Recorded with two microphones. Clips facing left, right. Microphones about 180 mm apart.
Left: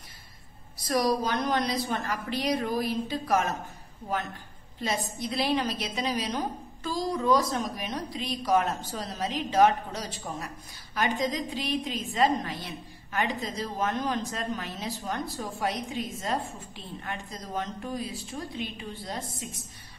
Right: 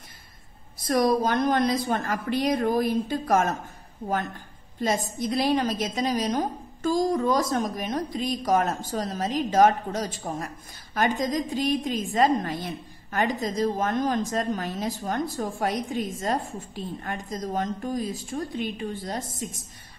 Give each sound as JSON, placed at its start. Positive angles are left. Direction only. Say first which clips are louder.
{"t": 0.8, "sound": "a woman's voice", "louder": "right 4 dB", "side_deg": -55}
{"t": 4.7, "sound": "a woman's voice", "louder": "right 5 dB", "side_deg": -45}